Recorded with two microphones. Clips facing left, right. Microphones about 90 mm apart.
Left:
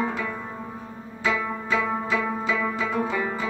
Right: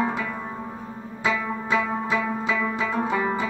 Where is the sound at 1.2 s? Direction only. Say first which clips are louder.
Even; 20° right (ahead or behind).